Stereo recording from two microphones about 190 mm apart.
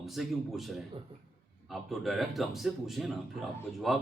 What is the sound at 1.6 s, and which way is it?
A man's voice, centre (ahead or behind).